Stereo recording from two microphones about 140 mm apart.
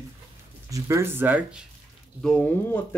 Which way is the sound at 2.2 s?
5° left (ahead or behind).